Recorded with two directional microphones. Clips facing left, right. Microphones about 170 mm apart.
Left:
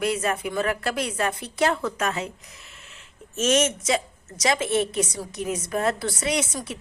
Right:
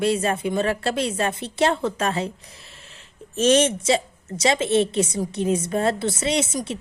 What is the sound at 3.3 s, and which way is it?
A woman's voice, 30° right (ahead or behind).